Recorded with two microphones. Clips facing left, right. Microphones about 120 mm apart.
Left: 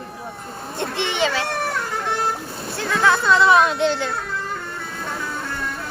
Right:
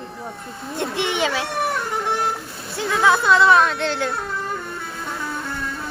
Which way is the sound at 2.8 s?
10° right (ahead or behind).